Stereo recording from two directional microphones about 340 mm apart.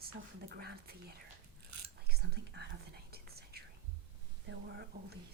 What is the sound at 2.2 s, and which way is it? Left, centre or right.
Whispering, right.